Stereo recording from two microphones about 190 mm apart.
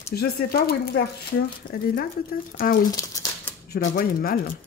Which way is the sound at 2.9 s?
15° left (ahead or behind).